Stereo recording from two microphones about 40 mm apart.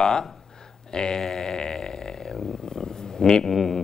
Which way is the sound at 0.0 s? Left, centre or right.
Centre.